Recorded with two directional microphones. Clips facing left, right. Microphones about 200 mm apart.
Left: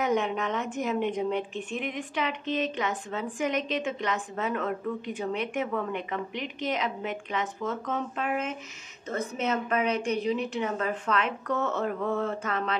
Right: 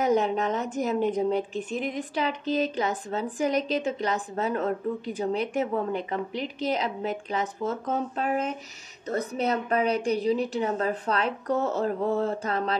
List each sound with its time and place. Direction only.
0.0 s a woman's voice: 35° right (ahead or behind)